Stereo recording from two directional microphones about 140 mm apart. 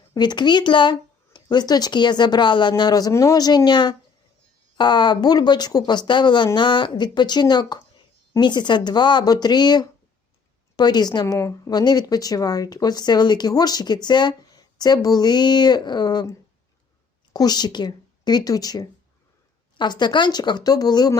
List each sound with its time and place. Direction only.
0.1 s a woman's voice: 30° left (ahead or behind)
17.3 s a woman's voice: 30° left (ahead or behind)